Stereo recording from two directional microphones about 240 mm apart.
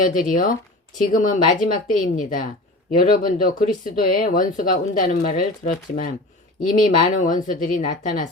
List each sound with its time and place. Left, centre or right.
0.0 s speech: left